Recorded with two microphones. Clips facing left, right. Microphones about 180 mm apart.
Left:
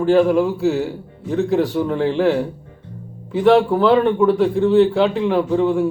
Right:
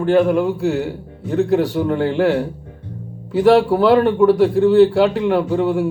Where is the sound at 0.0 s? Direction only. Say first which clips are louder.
Even; centre (ahead or behind).